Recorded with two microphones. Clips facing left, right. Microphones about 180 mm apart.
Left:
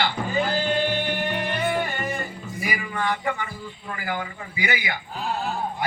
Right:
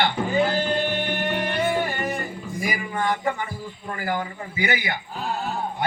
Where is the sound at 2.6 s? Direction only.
40° right (ahead or behind).